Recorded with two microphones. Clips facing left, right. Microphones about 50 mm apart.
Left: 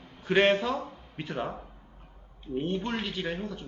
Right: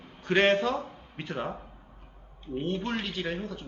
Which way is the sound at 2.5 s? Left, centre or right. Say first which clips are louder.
Even; centre.